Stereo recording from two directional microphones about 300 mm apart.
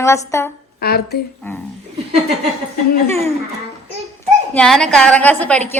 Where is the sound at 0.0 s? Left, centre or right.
Centre.